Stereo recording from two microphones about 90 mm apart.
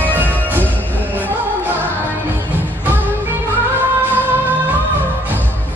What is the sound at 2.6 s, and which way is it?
Music, 20° right (ahead or behind).